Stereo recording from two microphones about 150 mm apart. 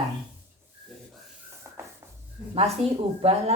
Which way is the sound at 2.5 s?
40° right (ahead or behind).